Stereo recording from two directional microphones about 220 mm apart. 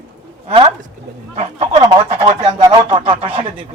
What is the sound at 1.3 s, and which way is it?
A man's voice, 30° right (ahead or behind).